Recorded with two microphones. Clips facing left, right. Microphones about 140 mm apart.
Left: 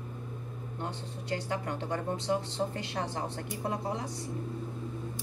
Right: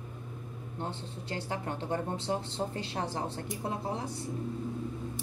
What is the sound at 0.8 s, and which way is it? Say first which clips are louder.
Speech: right 1 dB; 30° right (ahead or behind).